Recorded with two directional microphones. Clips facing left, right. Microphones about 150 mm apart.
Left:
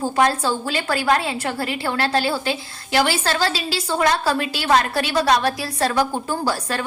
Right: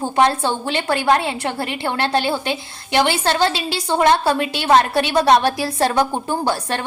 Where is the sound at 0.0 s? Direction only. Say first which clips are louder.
Right 2 dB; 25° right (ahead or behind).